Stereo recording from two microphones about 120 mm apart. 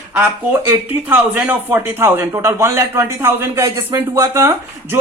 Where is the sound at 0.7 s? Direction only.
15° right (ahead or behind).